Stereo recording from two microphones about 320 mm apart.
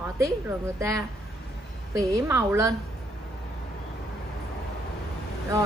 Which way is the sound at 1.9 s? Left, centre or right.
Centre.